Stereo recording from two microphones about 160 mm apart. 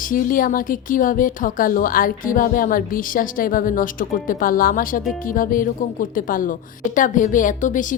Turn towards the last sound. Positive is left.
turn(degrees=55)  # may be behind; listen again after turning